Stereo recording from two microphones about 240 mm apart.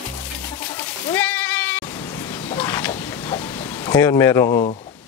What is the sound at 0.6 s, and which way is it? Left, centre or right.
Sheep, centre.